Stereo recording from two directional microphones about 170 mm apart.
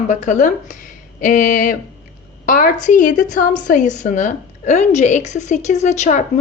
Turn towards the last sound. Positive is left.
turn(degrees=45)  # may be behind; listen again after turning